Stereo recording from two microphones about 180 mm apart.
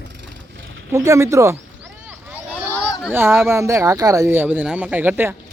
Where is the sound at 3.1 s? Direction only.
15° right (ahead or behind).